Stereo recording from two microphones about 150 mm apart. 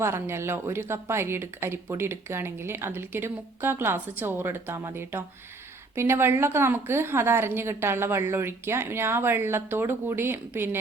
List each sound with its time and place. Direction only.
0.0 s speech: 15° right (ahead or behind)